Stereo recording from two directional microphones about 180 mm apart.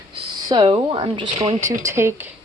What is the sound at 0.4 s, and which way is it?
Speech, 25° right (ahead or behind).